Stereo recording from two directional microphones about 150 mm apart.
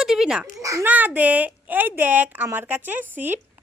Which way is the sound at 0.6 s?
20° right (ahead or behind).